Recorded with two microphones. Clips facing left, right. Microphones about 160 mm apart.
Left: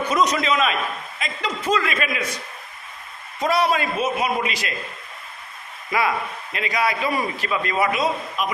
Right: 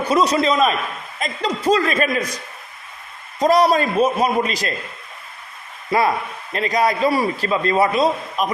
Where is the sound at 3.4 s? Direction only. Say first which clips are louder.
Right 5 dB; 40° right (ahead or behind).